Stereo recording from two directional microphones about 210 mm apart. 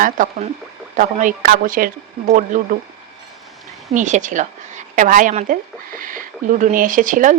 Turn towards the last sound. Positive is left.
turn(degrees=-40)  # may be behind; listen again after turning